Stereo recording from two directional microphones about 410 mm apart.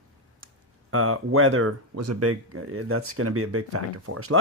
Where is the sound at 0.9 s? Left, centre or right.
Right.